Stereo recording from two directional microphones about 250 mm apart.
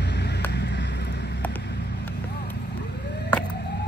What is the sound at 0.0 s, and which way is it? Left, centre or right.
Vehicle, left.